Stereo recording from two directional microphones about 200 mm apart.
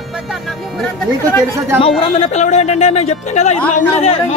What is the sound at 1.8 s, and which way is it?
Speech, 30° left (ahead or behind).